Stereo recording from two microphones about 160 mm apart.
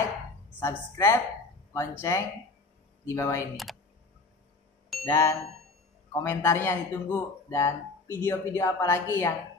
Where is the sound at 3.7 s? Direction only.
Centre (ahead or behind).